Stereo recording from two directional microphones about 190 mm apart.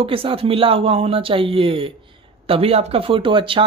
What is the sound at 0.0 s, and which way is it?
Speech, 30° right (ahead or behind).